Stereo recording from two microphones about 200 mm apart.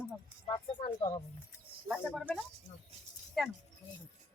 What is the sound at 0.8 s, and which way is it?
Speech, 25° left (ahead or behind).